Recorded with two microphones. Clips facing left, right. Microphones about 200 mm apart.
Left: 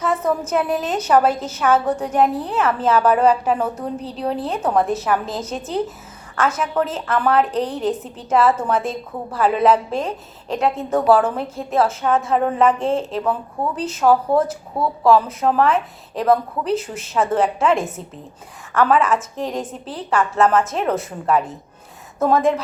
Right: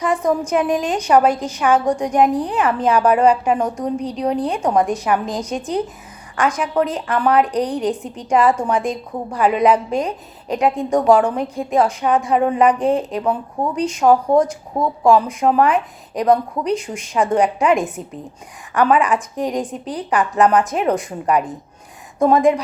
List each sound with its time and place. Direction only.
0.0 s a woman's voice: 15° right (ahead or behind)
5.5 s speech: 5° left (ahead or behind)
6.3 s a woman's voice: 15° right (ahead or behind)